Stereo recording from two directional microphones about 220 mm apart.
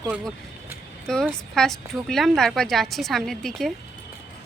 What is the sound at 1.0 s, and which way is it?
Speech, 5° left (ahead or behind).